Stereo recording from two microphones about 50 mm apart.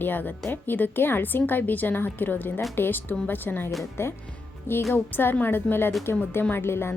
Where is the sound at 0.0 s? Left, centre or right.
Left.